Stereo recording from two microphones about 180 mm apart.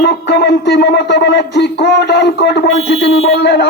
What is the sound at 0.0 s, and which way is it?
A man's voice, 65° left (ahead or behind).